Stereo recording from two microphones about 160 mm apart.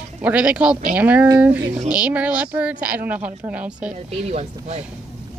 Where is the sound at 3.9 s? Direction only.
45° right (ahead or behind).